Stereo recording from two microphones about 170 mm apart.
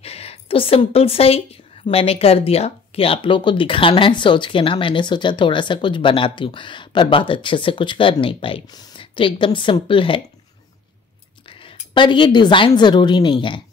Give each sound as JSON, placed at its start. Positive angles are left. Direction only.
{"t": 0.0, "sound": "a woman's voice", "side_deg": 35}
{"t": 11.9, "sound": "speech", "side_deg": 30}